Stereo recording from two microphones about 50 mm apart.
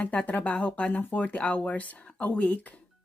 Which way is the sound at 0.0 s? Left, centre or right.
Left.